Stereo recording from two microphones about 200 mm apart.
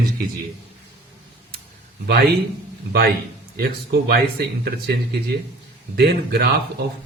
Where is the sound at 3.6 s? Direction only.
50° right (ahead or behind).